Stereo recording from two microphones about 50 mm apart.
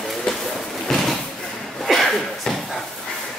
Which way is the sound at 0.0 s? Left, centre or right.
Centre.